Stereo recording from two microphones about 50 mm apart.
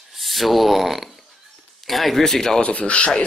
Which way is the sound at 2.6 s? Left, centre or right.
Left.